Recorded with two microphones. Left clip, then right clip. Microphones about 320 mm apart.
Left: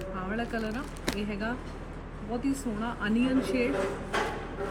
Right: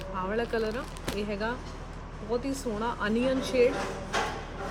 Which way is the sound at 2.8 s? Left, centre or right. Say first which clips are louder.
Right 3 dB; right.